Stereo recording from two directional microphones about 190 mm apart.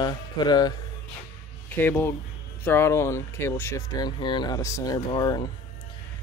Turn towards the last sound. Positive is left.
turn(degrees=20)  # may be behind; listen again after turning